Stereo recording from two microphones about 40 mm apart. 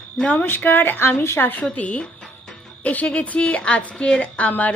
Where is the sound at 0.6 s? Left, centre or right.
Left.